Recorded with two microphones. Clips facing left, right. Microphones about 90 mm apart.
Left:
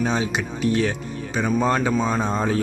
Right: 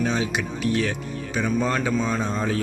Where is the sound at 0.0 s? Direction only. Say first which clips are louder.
Left 1 dB; 30° left (ahead or behind).